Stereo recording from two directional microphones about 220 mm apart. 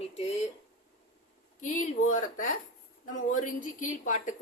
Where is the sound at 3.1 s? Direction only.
35° left (ahead or behind).